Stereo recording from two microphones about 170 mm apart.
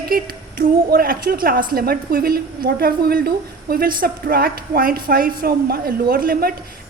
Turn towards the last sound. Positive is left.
turn(degrees=-60)  # may be behind; listen again after turning